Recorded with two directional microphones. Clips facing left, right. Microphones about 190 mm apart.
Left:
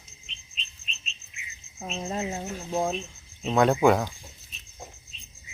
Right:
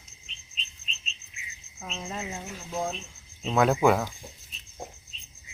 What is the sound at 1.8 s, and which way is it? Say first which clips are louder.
Cricket: left 5 dB; 35° left (ahead or behind).